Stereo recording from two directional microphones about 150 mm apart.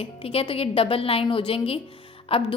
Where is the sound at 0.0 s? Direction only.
40° left (ahead or behind).